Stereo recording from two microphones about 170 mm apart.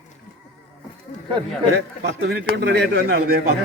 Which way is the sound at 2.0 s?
70° right (ahead or behind).